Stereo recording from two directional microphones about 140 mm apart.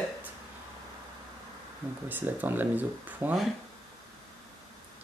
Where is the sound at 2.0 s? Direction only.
15° right (ahead or behind).